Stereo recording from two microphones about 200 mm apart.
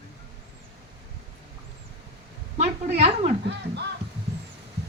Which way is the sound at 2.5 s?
35° right (ahead or behind).